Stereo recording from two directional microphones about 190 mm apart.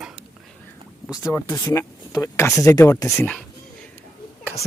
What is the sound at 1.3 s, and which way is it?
Speech, 15° left (ahead or behind).